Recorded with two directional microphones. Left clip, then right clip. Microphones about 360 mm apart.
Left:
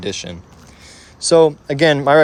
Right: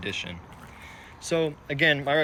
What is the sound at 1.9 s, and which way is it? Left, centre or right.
Speech, left.